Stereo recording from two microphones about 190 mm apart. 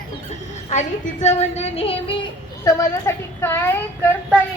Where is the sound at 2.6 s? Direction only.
15° left (ahead or behind).